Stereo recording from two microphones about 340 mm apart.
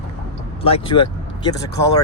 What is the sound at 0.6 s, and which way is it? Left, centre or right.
Speech, centre.